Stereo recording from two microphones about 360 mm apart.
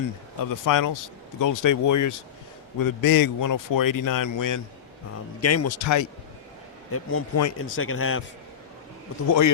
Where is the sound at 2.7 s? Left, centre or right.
Left.